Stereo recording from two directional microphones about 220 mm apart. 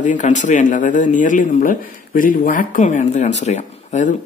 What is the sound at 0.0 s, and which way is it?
Speech, 35° left (ahead or behind).